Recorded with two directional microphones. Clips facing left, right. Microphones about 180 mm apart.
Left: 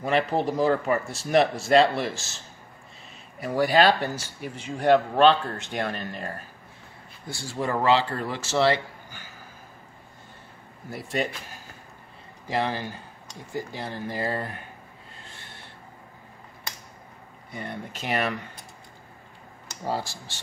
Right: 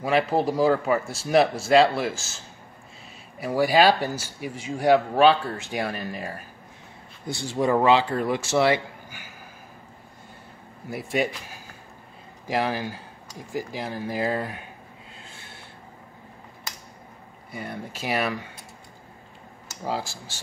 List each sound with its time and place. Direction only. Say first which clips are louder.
0.0 s speech: right 2 dB; 5° right (ahead or behind)
3.3 s speech: right 1 dB; 5° right (ahead or behind)
7.2 s speech: right 6 dB; 20° right (ahead or behind)
10.9 s speech: right 3 dB; 10° right (ahead or behind)
12.4 s speech: right 2 dB; 10° right (ahead or behind)
13.5 s speech: right 2 dB; 90° right
13.8 s speech: right 4 dB; 10° right (ahead or behind)
17.5 s speech: right 1 dB; 5° right (ahead or behind)
19.7 s speech: even; 10° right (ahead or behind)